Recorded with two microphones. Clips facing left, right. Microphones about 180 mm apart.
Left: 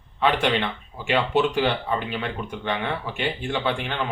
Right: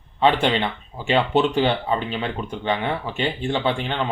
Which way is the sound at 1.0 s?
25° right (ahead or behind).